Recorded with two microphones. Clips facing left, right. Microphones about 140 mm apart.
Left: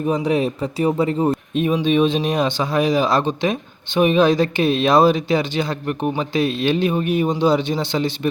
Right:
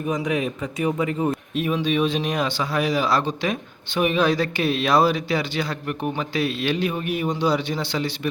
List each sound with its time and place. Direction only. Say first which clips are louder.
0.0 s speech: left 5 dB; 30° left (ahead or behind)
1.5 s speech: left 5 dB; 25° left (ahead or behind)